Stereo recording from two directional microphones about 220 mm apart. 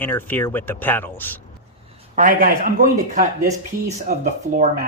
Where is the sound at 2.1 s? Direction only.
40° right (ahead or behind).